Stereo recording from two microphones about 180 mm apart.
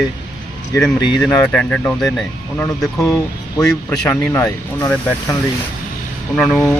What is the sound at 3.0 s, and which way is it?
Speech, 20° left (ahead or behind).